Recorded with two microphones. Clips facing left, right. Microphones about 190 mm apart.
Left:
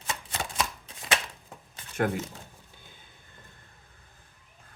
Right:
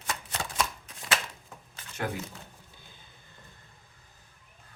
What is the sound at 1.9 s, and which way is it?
Speech, 50° left (ahead or behind).